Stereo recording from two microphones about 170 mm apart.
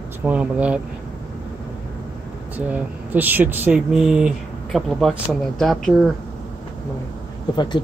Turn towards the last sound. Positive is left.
turn(degrees=25)  # may be behind; listen again after turning